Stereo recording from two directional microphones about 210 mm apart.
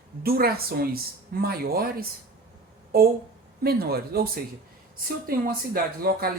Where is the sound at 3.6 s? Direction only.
45° right (ahead or behind).